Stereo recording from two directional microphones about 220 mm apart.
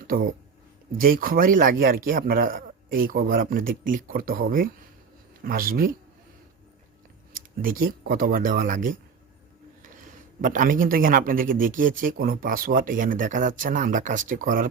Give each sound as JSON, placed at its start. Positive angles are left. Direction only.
{"t": 0.1, "sound": "speech", "side_deg": -40}
{"t": 7.3, "sound": "speech", "side_deg": -40}
{"t": 10.4, "sound": "speech", "side_deg": -40}